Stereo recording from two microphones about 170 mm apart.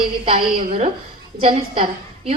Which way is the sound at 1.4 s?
30° right (ahead or behind).